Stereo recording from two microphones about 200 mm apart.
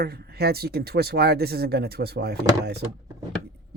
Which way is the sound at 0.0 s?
50° right (ahead or behind).